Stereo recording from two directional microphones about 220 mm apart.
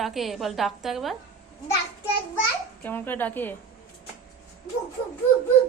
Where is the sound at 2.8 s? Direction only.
10° left (ahead or behind).